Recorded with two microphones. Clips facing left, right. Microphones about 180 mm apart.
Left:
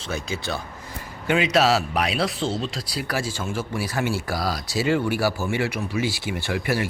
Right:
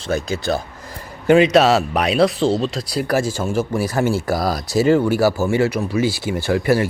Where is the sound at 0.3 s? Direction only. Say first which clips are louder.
Right 8 dB; 40° right (ahead or behind).